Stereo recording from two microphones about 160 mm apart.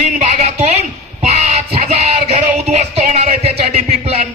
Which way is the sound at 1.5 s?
45° right (ahead or behind).